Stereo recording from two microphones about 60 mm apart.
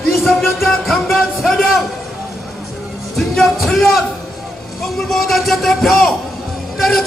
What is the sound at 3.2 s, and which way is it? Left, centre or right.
Music, centre.